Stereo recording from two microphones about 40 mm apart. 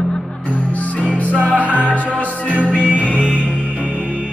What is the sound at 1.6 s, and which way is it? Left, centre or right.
Music, right.